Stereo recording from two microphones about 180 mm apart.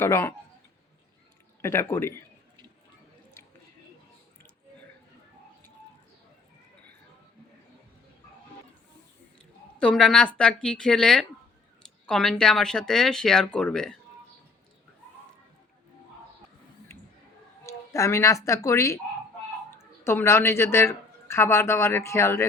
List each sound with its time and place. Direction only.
0.0 s a man's voice: 15° left (ahead or behind)
1.6 s a man's voice: 15° left (ahead or behind)
9.7 s speech: 5° left (ahead or behind)
17.7 s speech: 15° left (ahead or behind)
20.1 s a man's voice: 15° left (ahead or behind)